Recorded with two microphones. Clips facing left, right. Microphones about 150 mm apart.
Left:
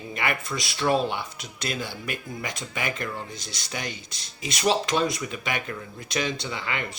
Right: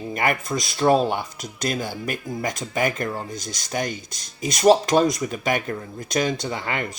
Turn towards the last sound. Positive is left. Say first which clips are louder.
# right 4 dB
turn(degrees=-45)  # may be behind; listen again after turning